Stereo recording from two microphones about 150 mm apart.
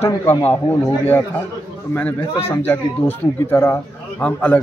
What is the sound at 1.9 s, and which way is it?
A man's voice, 15° left (ahead or behind).